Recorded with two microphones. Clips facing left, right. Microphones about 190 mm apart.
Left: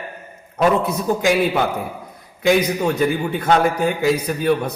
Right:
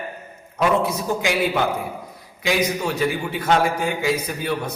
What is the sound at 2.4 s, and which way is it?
A man's voice, 50° left (ahead or behind).